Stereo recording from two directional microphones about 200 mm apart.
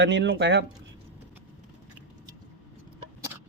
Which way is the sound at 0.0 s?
60° right (ahead or behind).